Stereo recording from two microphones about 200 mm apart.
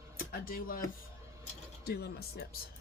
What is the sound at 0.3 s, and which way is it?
Speech, 45° left (ahead or behind).